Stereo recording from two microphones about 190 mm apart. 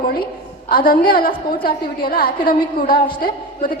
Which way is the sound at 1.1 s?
45° left (ahead or behind).